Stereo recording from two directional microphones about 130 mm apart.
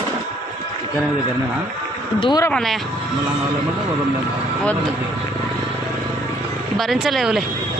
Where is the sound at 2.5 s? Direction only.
Centre (ahead or behind).